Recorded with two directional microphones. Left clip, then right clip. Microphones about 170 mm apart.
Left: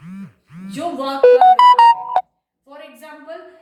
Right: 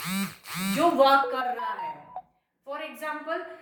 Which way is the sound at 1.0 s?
25° right (ahead or behind).